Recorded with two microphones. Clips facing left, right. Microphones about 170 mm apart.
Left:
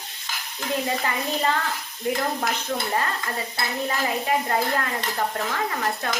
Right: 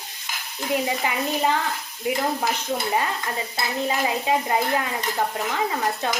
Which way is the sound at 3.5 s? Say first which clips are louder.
Right 3 dB; 15° right (ahead or behind).